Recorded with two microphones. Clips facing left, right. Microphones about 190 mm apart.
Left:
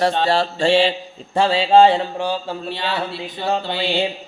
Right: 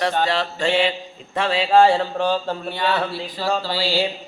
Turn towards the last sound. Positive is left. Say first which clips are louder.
# left 1 dB
turn(degrees=20)  # may be behind; listen again after turning